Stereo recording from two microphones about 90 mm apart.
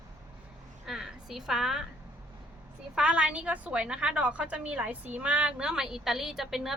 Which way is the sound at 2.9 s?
10° right (ahead or behind).